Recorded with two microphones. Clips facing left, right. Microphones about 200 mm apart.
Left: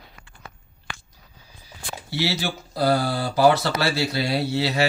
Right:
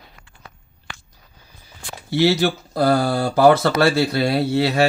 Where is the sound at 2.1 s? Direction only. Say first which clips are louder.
Right 9 dB; 50° right (ahead or behind).